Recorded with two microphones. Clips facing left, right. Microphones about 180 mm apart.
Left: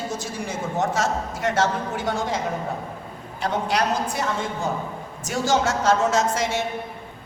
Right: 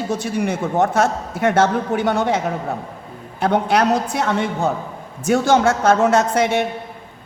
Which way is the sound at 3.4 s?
60° right (ahead or behind).